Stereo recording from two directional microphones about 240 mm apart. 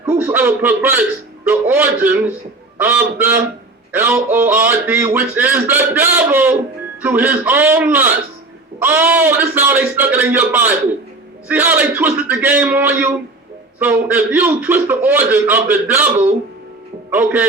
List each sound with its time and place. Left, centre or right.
0.0 s speech: centre